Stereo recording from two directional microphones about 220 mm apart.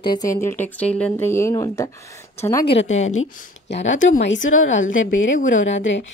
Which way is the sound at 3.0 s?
65° left (ahead or behind).